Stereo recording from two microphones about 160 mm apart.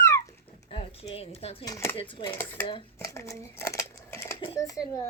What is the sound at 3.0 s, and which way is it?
Scissors, 20° left (ahead or behind).